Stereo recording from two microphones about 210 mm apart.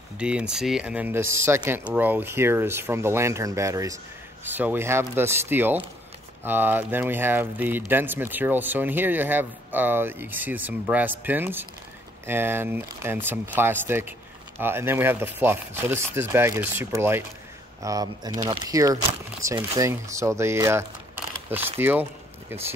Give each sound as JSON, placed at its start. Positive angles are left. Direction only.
{"t": 0.2, "sound": "speech", "side_deg": -5}